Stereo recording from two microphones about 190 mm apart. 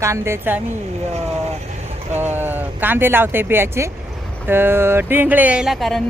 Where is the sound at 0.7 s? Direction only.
35° right (ahead or behind).